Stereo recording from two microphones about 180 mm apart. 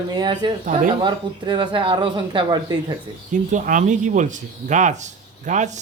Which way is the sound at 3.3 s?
45° right (ahead or behind).